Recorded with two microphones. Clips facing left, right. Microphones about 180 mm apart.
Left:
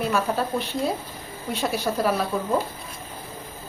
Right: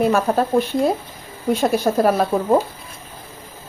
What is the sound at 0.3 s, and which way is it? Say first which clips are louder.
Speech: right 7 dB; 45° right (ahead or behind).